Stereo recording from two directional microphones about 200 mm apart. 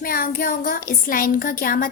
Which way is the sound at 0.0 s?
45° left (ahead or behind).